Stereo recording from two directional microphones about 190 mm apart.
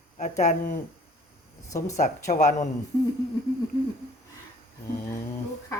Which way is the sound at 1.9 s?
40° left (ahead or behind).